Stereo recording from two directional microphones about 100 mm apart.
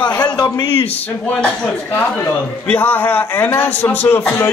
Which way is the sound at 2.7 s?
15° left (ahead or behind).